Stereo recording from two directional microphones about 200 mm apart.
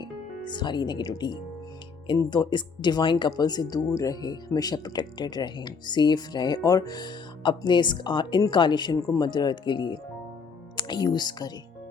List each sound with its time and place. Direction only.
0.0 s speech: 20° left (ahead or behind)